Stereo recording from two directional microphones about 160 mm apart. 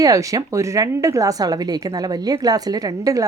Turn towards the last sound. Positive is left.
turn(degrees=-20)  # may be behind; listen again after turning